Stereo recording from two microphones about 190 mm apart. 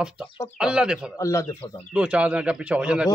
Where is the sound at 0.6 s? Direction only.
5° right (ahead or behind).